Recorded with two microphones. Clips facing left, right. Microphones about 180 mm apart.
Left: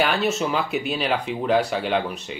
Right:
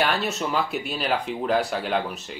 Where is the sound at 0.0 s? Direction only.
Centre (ahead or behind).